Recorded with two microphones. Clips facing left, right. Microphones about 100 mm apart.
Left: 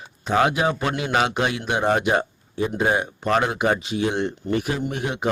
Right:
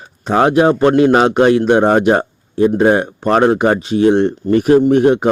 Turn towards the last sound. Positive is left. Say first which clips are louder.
# right 15 dB
turn(degrees=-45)  # may be behind; listen again after turning